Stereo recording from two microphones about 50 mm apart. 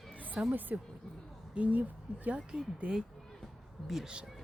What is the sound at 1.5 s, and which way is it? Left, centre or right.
Speech, right.